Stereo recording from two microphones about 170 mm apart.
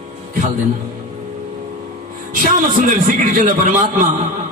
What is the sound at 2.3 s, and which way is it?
A man's voice, 55° right (ahead or behind).